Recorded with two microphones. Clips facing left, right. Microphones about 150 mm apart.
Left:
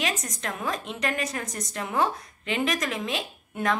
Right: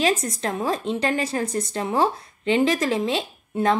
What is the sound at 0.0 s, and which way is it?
A woman's voice, 30° right (ahead or behind).